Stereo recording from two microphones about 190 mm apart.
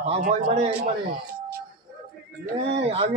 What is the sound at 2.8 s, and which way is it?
Speech, 30° right (ahead or behind).